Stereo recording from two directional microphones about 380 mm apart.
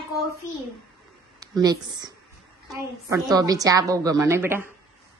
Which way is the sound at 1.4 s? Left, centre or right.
Centre.